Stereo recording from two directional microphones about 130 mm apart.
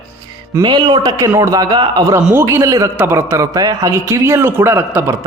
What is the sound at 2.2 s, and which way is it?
Speech, 15° right (ahead or behind).